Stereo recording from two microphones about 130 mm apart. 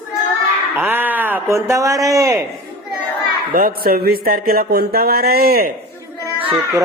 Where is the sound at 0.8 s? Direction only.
15° right (ahead or behind).